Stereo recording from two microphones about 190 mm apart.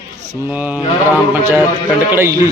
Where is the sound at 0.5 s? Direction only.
10° right (ahead or behind).